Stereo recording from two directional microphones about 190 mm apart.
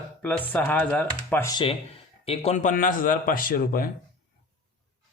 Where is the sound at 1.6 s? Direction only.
30° left (ahead or behind); by 3.9 s 50° left (ahead or behind).